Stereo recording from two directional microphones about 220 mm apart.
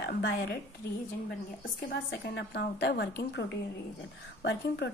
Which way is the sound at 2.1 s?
50° left (ahead or behind).